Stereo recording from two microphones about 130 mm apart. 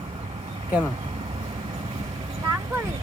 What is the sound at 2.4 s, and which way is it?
Vehicle, 25° right (ahead or behind).